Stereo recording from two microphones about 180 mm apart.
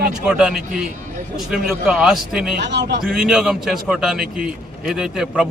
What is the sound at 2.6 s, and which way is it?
Speech, 75° right (ahead or behind).